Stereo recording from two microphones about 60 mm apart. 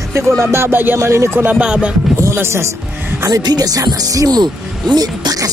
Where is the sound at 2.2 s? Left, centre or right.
Right.